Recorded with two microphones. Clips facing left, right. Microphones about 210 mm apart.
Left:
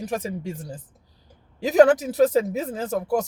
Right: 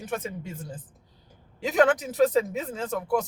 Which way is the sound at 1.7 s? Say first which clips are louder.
Left 6 dB; 35° left (ahead or behind).